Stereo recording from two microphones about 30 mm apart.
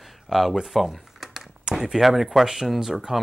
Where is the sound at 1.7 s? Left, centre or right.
Right.